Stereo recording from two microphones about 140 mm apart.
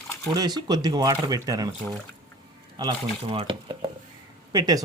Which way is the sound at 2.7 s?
35° right (ahead or behind).